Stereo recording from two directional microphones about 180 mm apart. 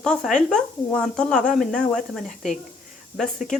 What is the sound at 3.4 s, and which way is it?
Speech, 45° left (ahead or behind).